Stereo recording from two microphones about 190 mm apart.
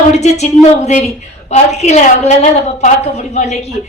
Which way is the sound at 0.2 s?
35° left (ahead or behind).